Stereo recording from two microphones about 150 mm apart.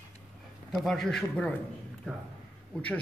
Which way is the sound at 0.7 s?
Centre (ahead or behind).